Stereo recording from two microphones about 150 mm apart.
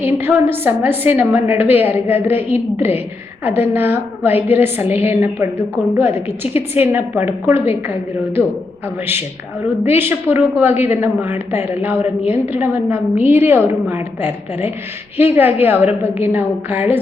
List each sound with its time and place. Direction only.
0.0 s a woman's voice: 15° right (ahead or behind)
10.0 s a woman's voice: 15° right (ahead or behind)